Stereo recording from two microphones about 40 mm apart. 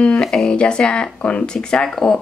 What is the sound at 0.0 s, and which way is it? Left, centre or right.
Speech, left.